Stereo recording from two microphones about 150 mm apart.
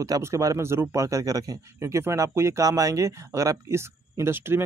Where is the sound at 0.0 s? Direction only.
20° right (ahead or behind).